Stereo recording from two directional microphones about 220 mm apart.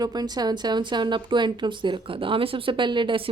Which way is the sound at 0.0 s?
20° right (ahead or behind).